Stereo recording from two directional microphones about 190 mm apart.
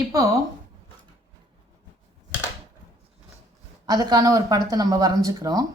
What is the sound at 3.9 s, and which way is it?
Speech, 20° right (ahead or behind).